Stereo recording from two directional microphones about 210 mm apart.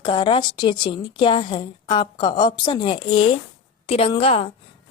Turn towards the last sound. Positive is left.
turn(degrees=30)  # may be behind; listen again after turning